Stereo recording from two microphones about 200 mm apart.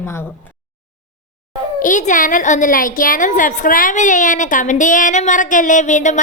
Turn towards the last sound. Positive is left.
turn(degrees=35)  # may be behind; listen again after turning